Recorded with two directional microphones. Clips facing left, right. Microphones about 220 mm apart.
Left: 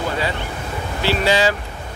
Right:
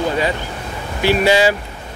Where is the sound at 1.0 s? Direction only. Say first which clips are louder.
Right 4 dB; 15° right (ahead or behind).